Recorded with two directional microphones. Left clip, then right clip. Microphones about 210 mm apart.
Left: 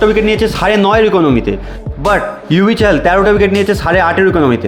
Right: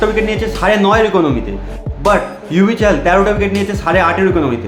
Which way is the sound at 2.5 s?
35° left (ahead or behind).